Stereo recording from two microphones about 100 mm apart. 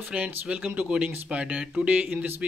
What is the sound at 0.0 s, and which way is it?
Speech, 15° right (ahead or behind).